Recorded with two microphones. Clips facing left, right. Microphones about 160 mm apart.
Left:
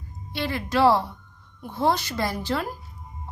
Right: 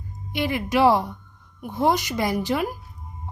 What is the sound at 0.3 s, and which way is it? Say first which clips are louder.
A woman's voice: right 2 dB; 15° right (ahead or behind).